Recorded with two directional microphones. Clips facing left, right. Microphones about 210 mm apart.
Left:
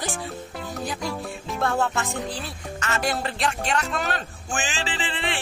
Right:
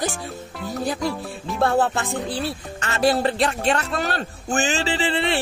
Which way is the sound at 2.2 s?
Centre (ahead or behind).